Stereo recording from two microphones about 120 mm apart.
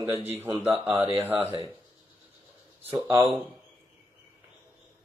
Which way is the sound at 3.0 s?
20° right (ahead or behind).